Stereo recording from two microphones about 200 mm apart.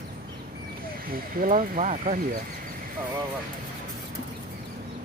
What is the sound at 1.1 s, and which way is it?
Speech, 45° right (ahead or behind).